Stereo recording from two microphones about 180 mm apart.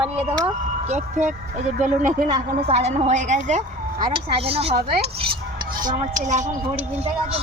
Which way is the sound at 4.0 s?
30° right (ahead or behind).